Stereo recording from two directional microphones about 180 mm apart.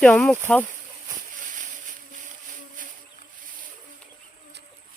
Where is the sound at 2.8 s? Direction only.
50° right (ahead or behind).